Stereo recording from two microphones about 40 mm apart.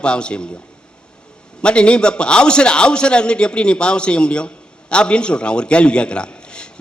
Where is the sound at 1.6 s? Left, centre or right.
Left.